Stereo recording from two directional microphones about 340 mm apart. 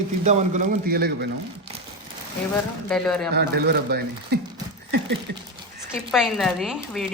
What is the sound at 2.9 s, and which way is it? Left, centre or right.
Speech, centre.